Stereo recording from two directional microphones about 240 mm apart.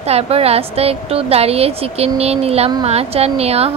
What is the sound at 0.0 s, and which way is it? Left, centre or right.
A woman's voice, right.